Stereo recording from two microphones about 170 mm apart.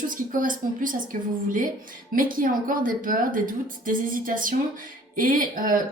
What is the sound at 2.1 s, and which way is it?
Speech, 55° right (ahead or behind).